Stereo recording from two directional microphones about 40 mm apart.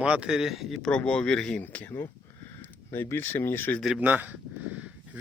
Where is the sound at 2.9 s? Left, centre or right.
Left.